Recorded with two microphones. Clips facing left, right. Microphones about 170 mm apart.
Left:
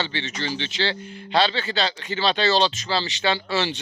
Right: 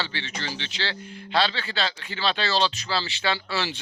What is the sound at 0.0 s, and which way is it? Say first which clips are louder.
Speech: left 4 dB; 25° left (ahead or behind).